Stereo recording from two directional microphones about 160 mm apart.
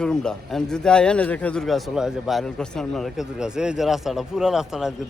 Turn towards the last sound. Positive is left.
turn(degrees=-5)  # may be behind; listen again after turning